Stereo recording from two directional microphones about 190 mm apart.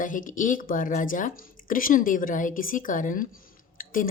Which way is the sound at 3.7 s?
45° left (ahead or behind).